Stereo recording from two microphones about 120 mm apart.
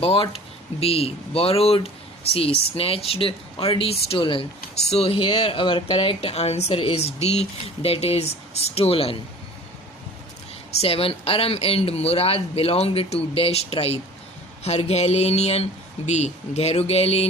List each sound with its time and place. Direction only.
0.0 s speech: 55° left (ahead or behind)
10.8 s speech: 55° left (ahead or behind)